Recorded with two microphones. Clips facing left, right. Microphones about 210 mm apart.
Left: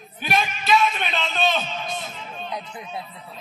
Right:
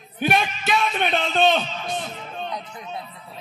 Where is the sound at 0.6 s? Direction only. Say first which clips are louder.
Left 1 dB; 50° right (ahead or behind).